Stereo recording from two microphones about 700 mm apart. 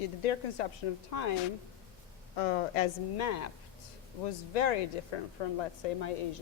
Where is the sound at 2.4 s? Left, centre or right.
Left.